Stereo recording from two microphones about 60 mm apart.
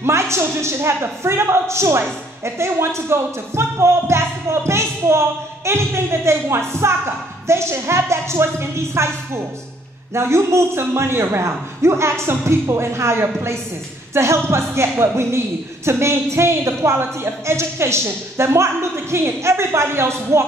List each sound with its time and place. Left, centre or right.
0.0 s a woman's voice: right